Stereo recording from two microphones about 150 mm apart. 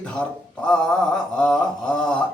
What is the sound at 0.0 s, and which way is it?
Speech, 5° left (ahead or behind).